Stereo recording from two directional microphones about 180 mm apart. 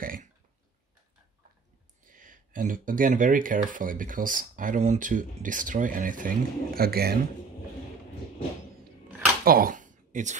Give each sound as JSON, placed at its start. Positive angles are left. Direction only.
{"t": 0.0, "sound": "speech", "side_deg": -50}
{"t": 2.0, "sound": "speech", "side_deg": -45}
{"t": 9.4, "sound": "a sound", "side_deg": -55}